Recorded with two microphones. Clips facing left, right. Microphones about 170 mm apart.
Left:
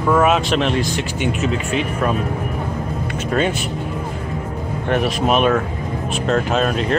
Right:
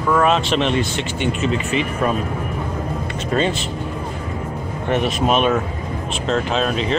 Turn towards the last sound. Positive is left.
turn(degrees=0)  # may be behind; listen again after turning